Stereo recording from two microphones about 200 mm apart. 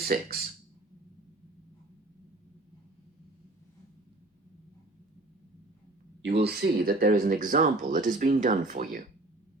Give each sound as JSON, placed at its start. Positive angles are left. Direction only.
{"t": 0.0, "sound": "speech", "side_deg": -50}
{"t": 6.2, "sound": "speech", "side_deg": -55}